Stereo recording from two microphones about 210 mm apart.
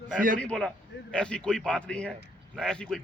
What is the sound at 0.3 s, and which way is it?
A man's voice, 5° left (ahead or behind).